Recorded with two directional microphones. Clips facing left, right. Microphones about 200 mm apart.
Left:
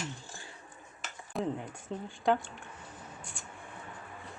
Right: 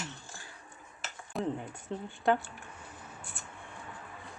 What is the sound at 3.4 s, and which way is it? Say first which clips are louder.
Mouse: even; 5° right (ahead or behind).